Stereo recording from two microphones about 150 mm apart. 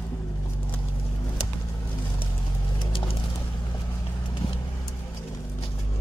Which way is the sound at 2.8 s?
35° left (ahead or behind).